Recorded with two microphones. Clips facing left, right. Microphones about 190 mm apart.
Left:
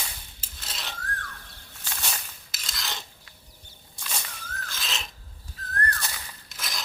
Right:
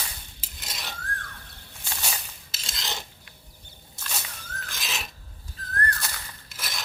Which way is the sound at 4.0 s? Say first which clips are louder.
Even; 5° right (ahead or behind).